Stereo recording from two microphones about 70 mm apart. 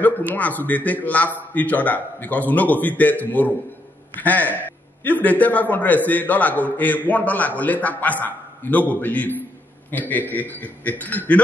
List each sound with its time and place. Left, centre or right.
0.4 s a man's voice: left